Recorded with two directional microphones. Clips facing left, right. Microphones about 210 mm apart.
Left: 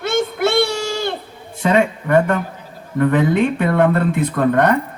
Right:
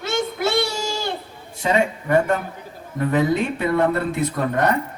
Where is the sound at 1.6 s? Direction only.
55° left (ahead or behind).